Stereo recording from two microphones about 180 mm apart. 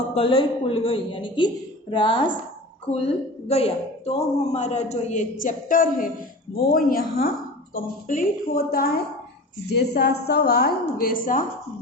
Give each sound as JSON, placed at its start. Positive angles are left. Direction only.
{"t": 0.1, "sound": "a woman's voice", "side_deg": 30}